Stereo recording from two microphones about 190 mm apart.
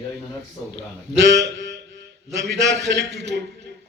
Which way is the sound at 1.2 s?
65° right (ahead or behind).